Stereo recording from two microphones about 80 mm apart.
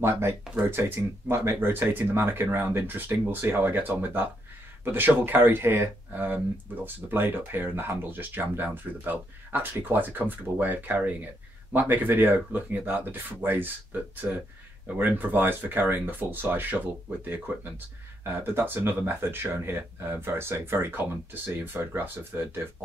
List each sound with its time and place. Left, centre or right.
0.0 s speech: right
14.9 s speech: right